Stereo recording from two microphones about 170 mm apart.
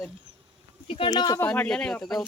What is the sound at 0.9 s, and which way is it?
Speech, 30° left (ahead or behind).